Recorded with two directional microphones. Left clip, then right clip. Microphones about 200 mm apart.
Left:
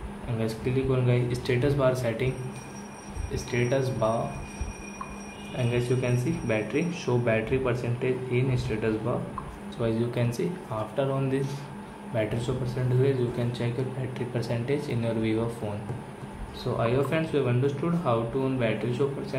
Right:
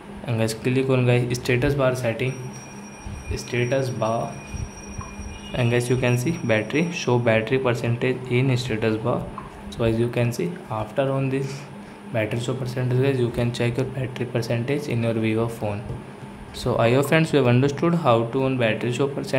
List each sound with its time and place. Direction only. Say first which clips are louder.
0.4 s speech: right 6 dB; 35° right (ahead or behind)
3.3 s speech: right 3 dB; 15° right (ahead or behind)
5.6 s speech: right 6 dB; 35° right (ahead or behind)
16.7 s speech: right 7 dB; 35° right (ahead or behind)